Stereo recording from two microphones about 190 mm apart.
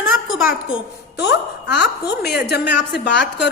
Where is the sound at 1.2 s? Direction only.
65° left (ahead or behind).